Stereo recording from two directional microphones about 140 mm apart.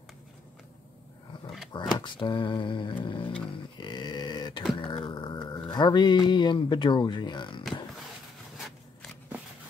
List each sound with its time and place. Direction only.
1.7 s speech: 30° left (ahead or behind)
3.8 s a sound: 30° left (ahead or behind)
5.6 s speech: 35° left (ahead or behind)